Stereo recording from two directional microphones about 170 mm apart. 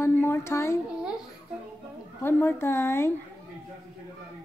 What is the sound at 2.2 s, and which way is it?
Speech, 15° left (ahead or behind).